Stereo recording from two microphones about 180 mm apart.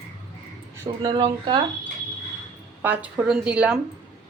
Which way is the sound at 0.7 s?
15° right (ahead or behind).